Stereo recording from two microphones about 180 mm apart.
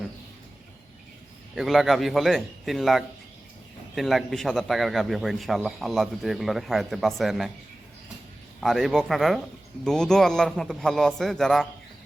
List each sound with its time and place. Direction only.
1.5 s a man's voice: centre (ahead or behind)
8.6 s a man's voice: centre (ahead or behind)